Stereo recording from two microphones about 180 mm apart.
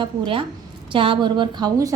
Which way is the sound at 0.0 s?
30° right (ahead or behind).